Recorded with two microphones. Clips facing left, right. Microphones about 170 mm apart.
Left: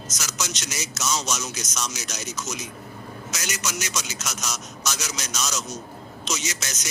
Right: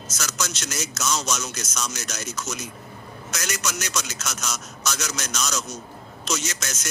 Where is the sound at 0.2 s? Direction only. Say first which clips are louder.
Right 2 dB; 10° left (ahead or behind).